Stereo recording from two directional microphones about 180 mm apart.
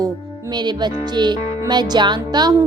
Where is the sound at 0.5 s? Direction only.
25° right (ahead or behind).